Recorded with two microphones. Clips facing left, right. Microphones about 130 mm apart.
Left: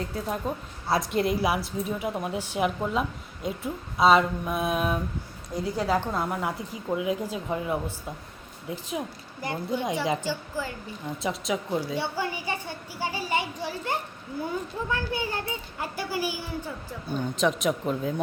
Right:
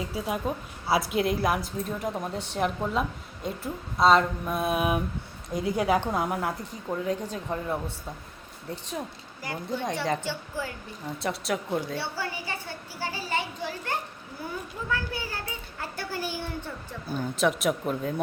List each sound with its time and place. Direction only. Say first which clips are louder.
0.0 s a woman's voice: even; 5° right (ahead or behind)
11.9 s a sound: left 3 dB; 15° left (ahead or behind)
14.8 s a child's voice: even; 20° left (ahead or behind)
15.8 s a woman's voice: left 3 dB; 10° left (ahead or behind)